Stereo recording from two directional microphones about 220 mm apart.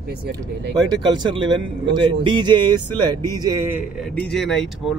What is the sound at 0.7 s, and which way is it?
Speech, 20° right (ahead or behind).